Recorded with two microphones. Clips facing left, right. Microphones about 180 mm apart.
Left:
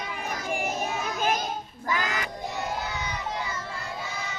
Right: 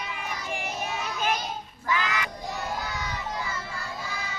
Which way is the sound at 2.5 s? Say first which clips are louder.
Left 1 dB; 20° left (ahead or behind).